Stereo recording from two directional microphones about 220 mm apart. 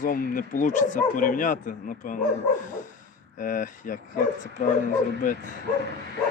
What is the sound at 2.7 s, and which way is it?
Dog, 35° left (ahead or behind).